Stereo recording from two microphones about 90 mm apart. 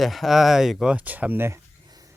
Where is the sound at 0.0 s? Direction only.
Centre (ahead or behind).